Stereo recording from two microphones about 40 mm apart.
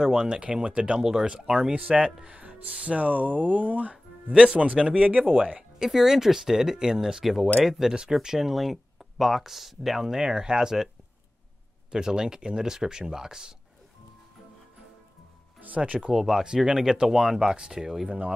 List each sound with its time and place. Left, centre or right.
0.0 s speech: right
3.9 s speech: centre
4.6 s speech: right
5.6 s speech: centre
11.9 s speech: centre
15.8 s speech: right
16.1 s speech: centre